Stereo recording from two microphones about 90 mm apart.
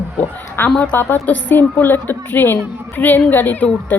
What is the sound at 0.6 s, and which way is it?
A woman's voice, 25° left (ahead or behind).